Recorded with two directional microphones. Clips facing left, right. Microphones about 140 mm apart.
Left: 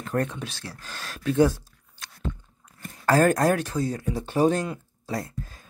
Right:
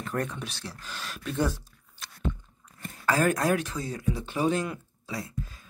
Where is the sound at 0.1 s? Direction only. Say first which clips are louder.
Left 5 dB; 30° left (ahead or behind).